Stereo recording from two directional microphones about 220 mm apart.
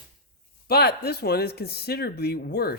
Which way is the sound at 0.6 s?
45° left (ahead or behind).